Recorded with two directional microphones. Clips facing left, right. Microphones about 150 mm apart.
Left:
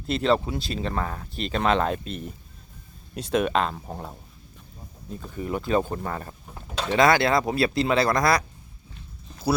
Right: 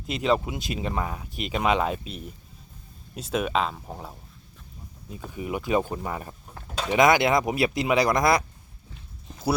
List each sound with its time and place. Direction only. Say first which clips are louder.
0.1 s speech: left 2 dB; 10° right (ahead or behind)
5.3 s speech: left 1 dB; 10° right (ahead or behind)